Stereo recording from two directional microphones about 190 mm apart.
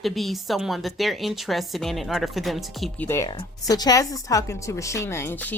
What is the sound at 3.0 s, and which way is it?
Speech, 15° left (ahead or behind).